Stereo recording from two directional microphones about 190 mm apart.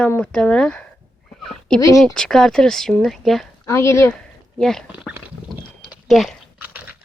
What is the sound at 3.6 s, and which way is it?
Speech, 15° left (ahead or behind).